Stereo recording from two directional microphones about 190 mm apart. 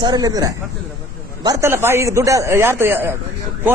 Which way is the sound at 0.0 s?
20° right (ahead or behind).